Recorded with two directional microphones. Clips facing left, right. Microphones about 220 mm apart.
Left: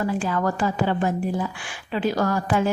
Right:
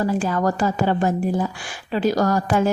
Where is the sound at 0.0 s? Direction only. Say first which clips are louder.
Right 3 dB; 40° right (ahead or behind).